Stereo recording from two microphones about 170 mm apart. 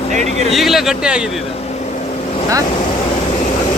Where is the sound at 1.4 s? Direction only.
35° left (ahead or behind).